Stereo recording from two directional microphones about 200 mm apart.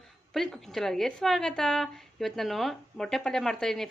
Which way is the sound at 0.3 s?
Centre (ahead or behind).